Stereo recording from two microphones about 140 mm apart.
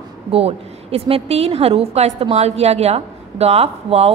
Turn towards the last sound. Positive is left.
turn(degrees=-45)  # may be behind; listen again after turning